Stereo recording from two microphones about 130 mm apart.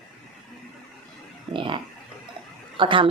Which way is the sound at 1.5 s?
40° right (ahead or behind).